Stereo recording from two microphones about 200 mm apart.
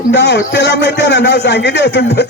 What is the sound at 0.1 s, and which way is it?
A man's voice, 60° left (ahead or behind).